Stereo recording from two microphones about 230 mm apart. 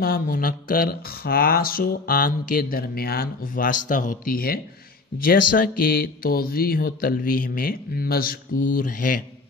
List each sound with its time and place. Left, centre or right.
0.0 s speech: left
5.6 s speech: left